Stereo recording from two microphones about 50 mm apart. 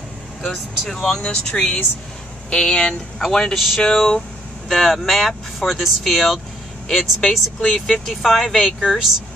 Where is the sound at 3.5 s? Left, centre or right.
Centre.